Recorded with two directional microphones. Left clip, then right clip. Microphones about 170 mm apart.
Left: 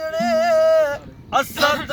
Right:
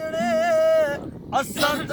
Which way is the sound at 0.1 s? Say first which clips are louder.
Left 3 dB; centre (ahead or behind).